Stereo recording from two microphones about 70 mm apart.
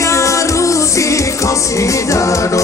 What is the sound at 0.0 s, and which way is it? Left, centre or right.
Music, left.